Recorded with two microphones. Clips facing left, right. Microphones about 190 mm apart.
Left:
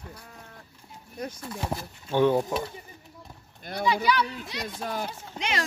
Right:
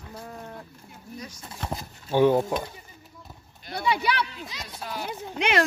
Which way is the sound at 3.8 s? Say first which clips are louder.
Left 1 dB; 60° right (ahead or behind).